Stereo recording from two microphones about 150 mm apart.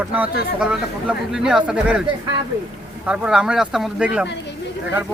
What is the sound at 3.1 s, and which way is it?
Speech, 5° right (ahead or behind).